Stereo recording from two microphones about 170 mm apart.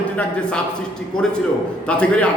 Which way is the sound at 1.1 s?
5° left (ahead or behind).